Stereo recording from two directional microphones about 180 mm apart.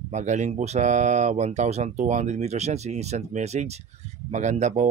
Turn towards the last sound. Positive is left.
turn(degrees=-40)  # may be behind; listen again after turning